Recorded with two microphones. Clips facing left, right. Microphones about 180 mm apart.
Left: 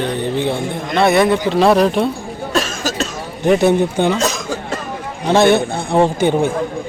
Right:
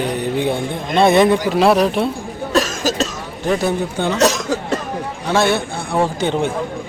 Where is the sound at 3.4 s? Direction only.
20° left (ahead or behind).